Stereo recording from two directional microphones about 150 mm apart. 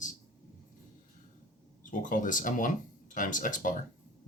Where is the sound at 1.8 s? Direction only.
60° left (ahead or behind).